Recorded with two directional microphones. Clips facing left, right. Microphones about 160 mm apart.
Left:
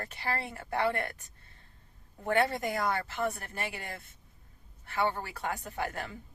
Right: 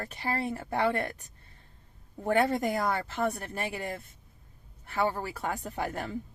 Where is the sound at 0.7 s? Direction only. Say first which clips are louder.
Right 1 dB; 20° right (ahead or behind).